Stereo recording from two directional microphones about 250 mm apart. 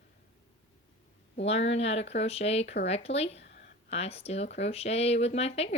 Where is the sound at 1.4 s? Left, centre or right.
Left.